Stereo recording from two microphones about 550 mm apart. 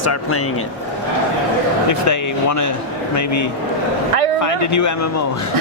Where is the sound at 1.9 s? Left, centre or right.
Left.